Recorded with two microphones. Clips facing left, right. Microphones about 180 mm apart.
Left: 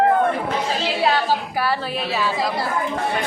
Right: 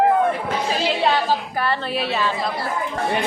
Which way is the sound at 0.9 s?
5° left (ahead or behind).